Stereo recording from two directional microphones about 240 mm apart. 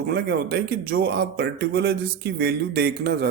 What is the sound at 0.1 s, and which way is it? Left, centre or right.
A man's voice, right.